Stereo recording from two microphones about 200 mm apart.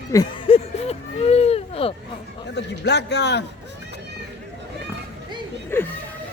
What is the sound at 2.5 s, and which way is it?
Speech, 55° left (ahead or behind).